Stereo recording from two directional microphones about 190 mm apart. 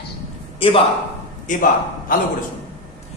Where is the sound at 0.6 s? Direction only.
30° left (ahead or behind).